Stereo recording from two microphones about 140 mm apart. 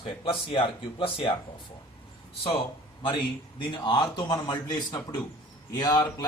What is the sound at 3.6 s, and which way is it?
Speech, 35° left (ahead or behind).